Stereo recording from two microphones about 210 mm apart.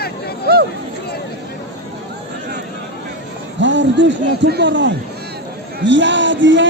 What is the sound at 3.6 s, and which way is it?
A man's voice, 60° right (ahead or behind).